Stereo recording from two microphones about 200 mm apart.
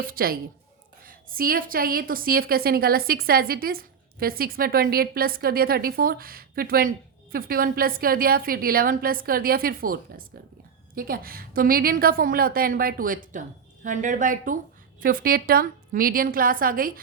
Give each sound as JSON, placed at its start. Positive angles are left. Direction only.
{"t": 0.0, "sound": "a woman's voice", "side_deg": -45}